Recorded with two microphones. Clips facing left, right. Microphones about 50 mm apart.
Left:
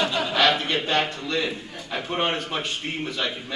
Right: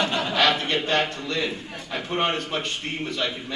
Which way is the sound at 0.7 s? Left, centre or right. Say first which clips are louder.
Even; centre.